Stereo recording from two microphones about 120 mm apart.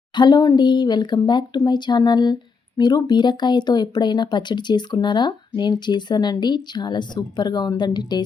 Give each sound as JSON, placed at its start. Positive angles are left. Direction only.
{"t": 0.2, "sound": "speech", "side_deg": 35}